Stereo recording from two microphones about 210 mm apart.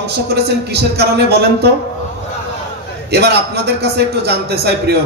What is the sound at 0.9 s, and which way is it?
Speech, 50° right (ahead or behind).